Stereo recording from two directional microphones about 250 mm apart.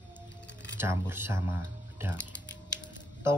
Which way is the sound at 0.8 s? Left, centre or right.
Centre.